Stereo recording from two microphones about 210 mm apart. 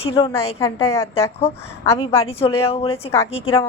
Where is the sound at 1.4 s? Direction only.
30° left (ahead or behind).